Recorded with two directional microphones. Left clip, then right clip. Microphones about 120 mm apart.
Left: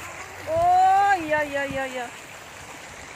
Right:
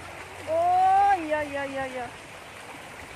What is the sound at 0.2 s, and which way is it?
Vehicle, 90° left.